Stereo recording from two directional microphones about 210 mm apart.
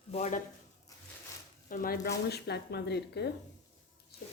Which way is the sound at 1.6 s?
40° left (ahead or behind).